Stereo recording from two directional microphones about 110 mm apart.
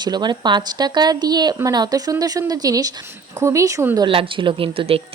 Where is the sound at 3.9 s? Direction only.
50° right (ahead or behind).